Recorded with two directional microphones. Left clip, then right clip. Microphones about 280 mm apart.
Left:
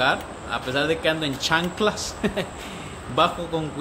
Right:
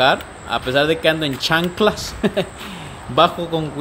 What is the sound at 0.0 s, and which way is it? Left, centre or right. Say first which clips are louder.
Speech: right 6 dB; centre.